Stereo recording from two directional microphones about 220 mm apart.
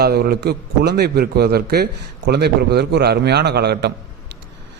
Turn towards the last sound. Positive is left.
turn(degrees=-50)  # may be behind; listen again after turning